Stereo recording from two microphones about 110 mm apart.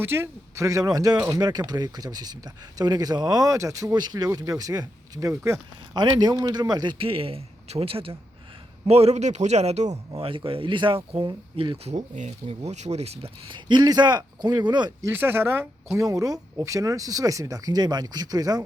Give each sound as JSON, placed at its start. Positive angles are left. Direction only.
{"t": 0.0, "sound": "speech", "side_deg": -20}
{"t": 6.0, "sound": "speech", "side_deg": -40}
{"t": 7.0, "sound": "a man's voice", "side_deg": -55}
{"t": 8.9, "sound": "a man's voice", "side_deg": -70}
{"t": 10.1, "sound": "speech", "side_deg": -55}
{"t": 11.9, "sound": "speech", "side_deg": -90}
{"t": 13.5, "sound": "speech", "side_deg": -40}
{"t": 15.0, "sound": "speech", "side_deg": -20}
{"t": 16.0, "sound": "speech", "side_deg": -30}